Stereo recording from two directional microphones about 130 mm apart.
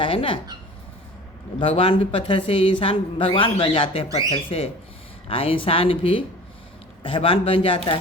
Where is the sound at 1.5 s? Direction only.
45° left (ahead or behind).